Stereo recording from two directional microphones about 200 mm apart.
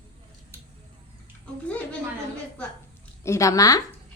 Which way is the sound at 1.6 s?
5° left (ahead or behind).